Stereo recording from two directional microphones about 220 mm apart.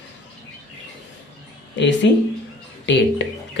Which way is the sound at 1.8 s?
55° left (ahead or behind).